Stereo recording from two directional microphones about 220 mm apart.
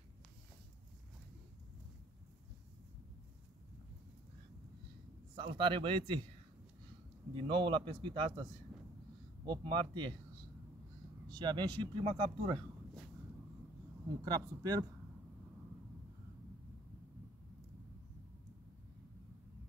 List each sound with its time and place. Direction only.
5.3 s speech: 20° right (ahead or behind)
7.3 s speech: 25° right (ahead or behind)
9.5 s speech: 20° right (ahead or behind)
11.2 s speech: 20° right (ahead or behind)
14.2 s speech: 15° right (ahead or behind)